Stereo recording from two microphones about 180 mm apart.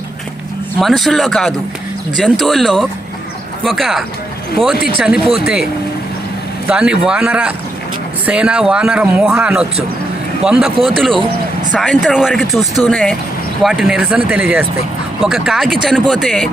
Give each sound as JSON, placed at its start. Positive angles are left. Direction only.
{"t": 0.8, "sound": "speech", "side_deg": 0}
{"t": 6.7, "sound": "speech", "side_deg": -5}